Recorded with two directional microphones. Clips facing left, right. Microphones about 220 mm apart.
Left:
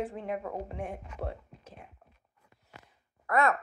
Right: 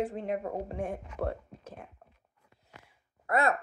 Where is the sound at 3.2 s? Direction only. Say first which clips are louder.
Left 1 dB; 30° right (ahead or behind).